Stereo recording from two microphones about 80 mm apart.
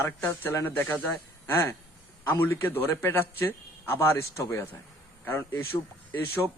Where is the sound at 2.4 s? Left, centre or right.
Left.